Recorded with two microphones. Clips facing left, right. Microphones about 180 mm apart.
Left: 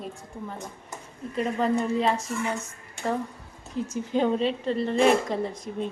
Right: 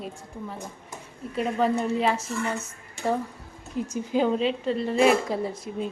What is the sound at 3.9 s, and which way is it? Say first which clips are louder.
A woman's voice: right 1 dB; 5° right (ahead or behind).